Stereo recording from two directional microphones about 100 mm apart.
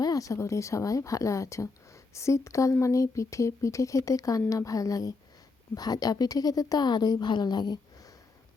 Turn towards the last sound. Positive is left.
turn(degrees=45)  # may be behind; listen again after turning